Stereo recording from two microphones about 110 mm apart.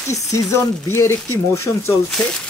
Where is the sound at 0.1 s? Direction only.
30° left (ahead or behind).